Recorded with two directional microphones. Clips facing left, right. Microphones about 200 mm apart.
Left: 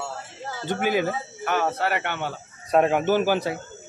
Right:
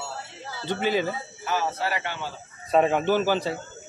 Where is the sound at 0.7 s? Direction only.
10° left (ahead or behind).